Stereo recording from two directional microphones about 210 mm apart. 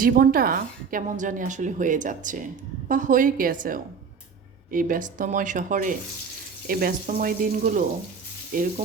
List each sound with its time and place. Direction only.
0.0 s a woman's voice: 45° right (ahead or behind)